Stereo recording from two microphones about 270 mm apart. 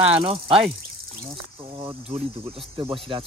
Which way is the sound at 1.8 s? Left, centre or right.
Right.